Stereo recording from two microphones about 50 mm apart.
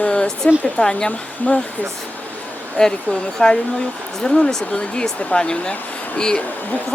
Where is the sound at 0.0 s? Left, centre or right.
Left.